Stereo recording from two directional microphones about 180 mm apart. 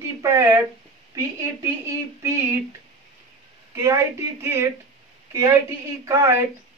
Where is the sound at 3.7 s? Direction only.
15° right (ahead or behind).